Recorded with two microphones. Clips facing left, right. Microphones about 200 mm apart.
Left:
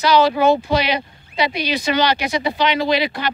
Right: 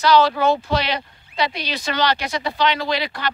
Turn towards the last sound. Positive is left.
turn(degrees=15)  # may be behind; listen again after turning